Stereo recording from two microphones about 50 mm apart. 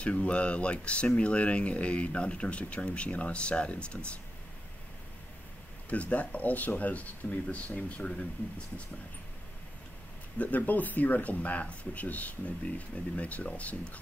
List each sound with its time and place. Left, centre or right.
0.0 s speech: left
5.9 s speech: left
10.4 s speech: left